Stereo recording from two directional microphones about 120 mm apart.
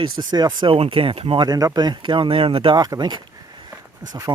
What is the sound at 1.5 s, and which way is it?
Speech, 30° right (ahead or behind).